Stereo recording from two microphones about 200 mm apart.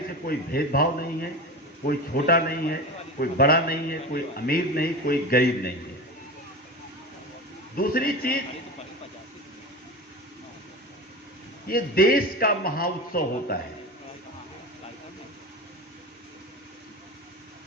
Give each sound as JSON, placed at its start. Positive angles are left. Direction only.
{"t": 0.3, "sound": "a man's voice", "side_deg": 50}
{"t": 7.8, "sound": "a man's voice", "side_deg": 50}
{"t": 11.7, "sound": "a man's voice", "side_deg": 50}